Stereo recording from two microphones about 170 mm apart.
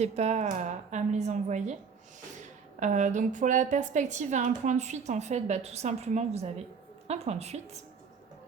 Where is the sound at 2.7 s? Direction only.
45° right (ahead or behind).